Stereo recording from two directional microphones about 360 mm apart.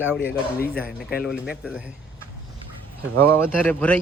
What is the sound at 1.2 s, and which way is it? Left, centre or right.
Speech, centre.